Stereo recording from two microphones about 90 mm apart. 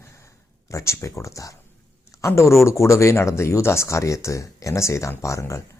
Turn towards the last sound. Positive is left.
turn(degrees=35)  # may be behind; listen again after turning